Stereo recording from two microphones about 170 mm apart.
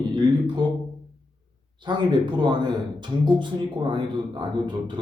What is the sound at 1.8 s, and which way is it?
Speech, 25° right (ahead or behind).